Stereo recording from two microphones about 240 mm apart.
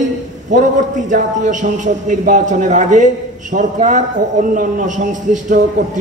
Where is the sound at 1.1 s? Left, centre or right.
Right.